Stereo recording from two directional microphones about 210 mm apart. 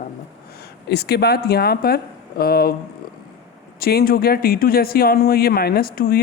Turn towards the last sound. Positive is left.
turn(degrees=45)  # may be behind; listen again after turning